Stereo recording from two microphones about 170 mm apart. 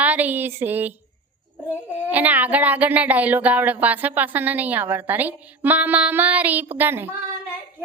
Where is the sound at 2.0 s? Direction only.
10° right (ahead or behind).